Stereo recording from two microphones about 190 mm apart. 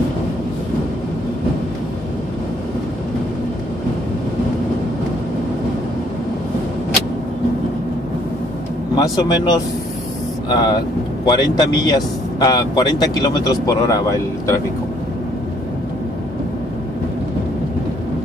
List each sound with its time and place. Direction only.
8.9 s speech: 20° left (ahead or behind)